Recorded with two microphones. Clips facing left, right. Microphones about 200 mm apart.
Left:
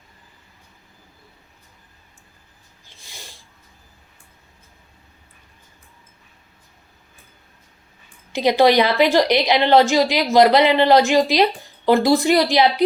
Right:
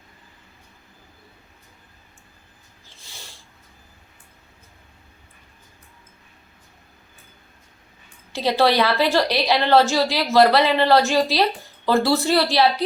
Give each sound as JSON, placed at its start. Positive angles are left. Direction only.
{"t": 3.0, "sound": "snort", "side_deg": 15}
{"t": 8.3, "sound": "a woman's voice", "side_deg": 15}